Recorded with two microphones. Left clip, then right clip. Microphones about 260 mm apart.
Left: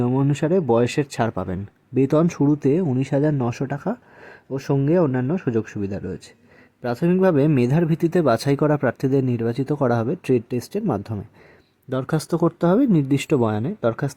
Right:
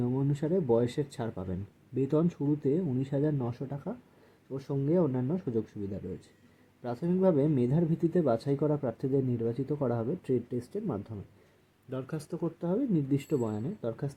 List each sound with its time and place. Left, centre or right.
0.0 s speech: left